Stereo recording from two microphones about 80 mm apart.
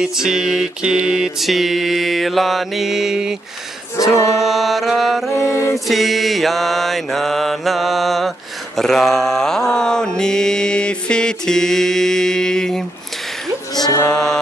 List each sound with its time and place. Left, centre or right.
0.0 s mantra: centre
4.4 s mantra: centre
5.3 s music: left
5.9 s mantra: centre
14.0 s mantra: centre